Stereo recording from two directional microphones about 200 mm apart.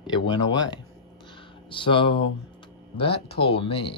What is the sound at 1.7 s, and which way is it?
Speech, 25° left (ahead or behind).